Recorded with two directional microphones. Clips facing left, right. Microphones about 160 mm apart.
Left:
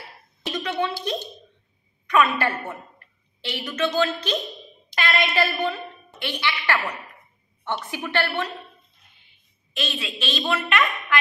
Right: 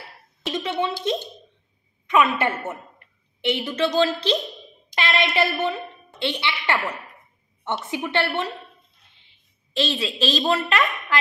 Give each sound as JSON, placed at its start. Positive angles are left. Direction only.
{"t": 0.5, "sound": "a sound", "side_deg": -25}
{"t": 2.0, "sound": "a woman's voice", "side_deg": -20}
{"t": 9.8, "sound": "a woman's voice", "side_deg": -30}